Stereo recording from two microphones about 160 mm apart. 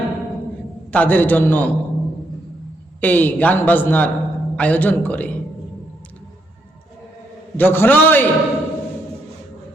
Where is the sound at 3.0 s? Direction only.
10° left (ahead or behind).